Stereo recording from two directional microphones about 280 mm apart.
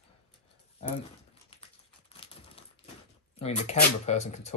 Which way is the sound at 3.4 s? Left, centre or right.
Left.